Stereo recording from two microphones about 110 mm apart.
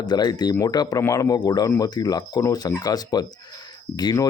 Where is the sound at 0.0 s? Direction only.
40° left (ahead or behind).